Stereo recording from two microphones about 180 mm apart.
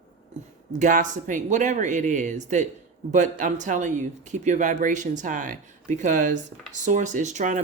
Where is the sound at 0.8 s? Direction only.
45° right (ahead or behind).